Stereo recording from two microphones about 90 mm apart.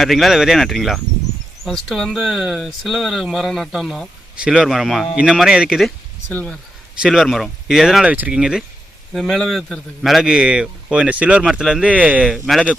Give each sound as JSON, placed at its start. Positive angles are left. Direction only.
{"t": 0.0, "sound": "speech", "side_deg": 0}
{"t": 4.4, "sound": "a man's voice", "side_deg": -10}
{"t": 7.0, "sound": "speech", "side_deg": -5}
{"t": 8.1, "sound": "speech", "side_deg": -20}
{"t": 8.4, "sound": "a man's voice", "side_deg": -10}
{"t": 9.1, "sound": "a man's voice", "side_deg": 5}
{"t": 12.3, "sound": "speech", "side_deg": 0}